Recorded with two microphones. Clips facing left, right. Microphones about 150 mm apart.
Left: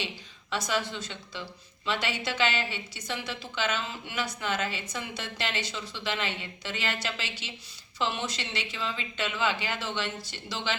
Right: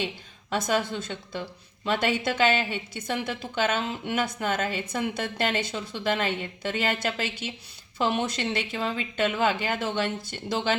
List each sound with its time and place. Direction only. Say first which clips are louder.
0.5 s a woman's voice: right 5 dB; 50° right (ahead or behind)